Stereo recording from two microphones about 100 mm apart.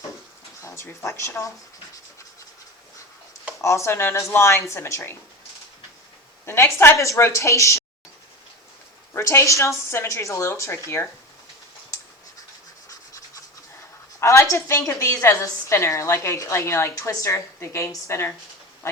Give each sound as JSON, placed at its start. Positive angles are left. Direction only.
{"t": 0.8, "sound": "a woman's voice", "side_deg": 30}
{"t": 3.6, "sound": "a woman's voice", "side_deg": 30}
{"t": 6.4, "sound": "a woman's voice", "side_deg": 25}
{"t": 9.1, "sound": "a woman's voice", "side_deg": 25}
{"t": 12.9, "sound": "scratch", "side_deg": 35}
{"t": 14.2, "sound": "a woman's voice", "side_deg": 30}